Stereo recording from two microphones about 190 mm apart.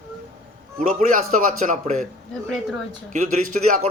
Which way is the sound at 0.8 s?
40° right (ahead or behind).